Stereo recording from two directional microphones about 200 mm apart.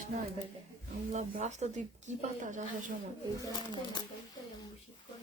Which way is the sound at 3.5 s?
20° left (ahead or behind).